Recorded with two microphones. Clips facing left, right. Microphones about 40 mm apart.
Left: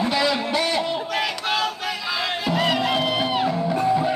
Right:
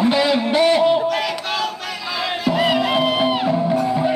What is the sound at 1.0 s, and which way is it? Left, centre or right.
Music, centre.